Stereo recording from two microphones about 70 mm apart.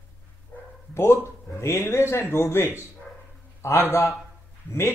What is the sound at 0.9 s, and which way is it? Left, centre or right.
A man's voice, left.